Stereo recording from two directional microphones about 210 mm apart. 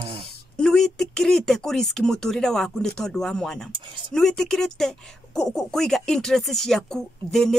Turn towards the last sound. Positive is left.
turn(degrees=5)  # may be behind; listen again after turning